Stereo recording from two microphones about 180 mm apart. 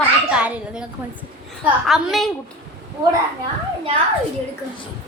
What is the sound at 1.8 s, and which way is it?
Speech, centre (ahead or behind).